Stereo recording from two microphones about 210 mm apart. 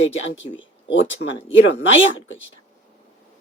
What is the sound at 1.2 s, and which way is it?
Speech, 55° left (ahead or behind).